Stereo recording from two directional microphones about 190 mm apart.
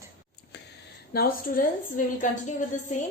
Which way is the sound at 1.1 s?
50° left (ahead or behind).